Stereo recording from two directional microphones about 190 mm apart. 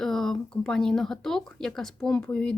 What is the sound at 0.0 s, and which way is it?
Speech, centre (ahead or behind).